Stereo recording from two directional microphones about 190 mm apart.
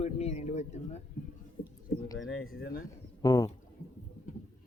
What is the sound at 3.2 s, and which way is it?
Speech, 20° left (ahead or behind).